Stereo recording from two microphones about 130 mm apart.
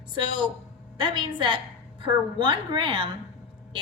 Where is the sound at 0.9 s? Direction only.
35° right (ahead or behind).